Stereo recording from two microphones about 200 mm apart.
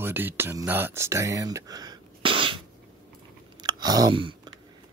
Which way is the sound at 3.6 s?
20° right (ahead or behind).